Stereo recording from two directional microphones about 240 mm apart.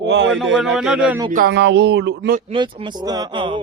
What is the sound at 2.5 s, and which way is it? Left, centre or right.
Speech, right.